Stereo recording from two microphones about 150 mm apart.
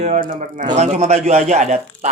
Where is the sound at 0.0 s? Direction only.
55° right (ahead or behind).